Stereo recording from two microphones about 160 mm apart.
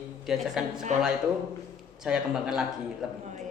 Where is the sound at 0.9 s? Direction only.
50° right (ahead or behind).